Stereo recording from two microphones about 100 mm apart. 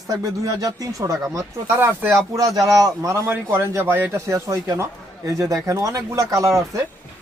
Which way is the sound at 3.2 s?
20° right (ahead or behind).